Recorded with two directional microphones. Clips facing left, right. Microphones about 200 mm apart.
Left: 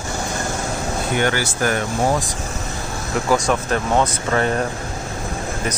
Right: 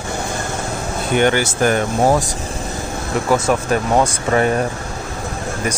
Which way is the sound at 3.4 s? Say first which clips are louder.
Right 3 dB; 10° right (ahead or behind).